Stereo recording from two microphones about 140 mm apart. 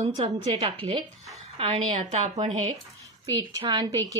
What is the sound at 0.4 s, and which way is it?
A woman's voice, 45° right (ahead or behind).